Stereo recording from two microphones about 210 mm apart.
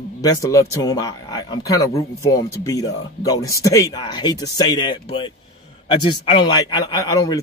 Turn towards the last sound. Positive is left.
turn(degrees=15)  # may be behind; listen again after turning